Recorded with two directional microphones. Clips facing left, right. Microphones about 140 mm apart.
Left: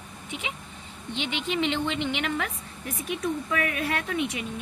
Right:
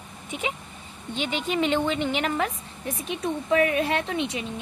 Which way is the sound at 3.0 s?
30° right (ahead or behind).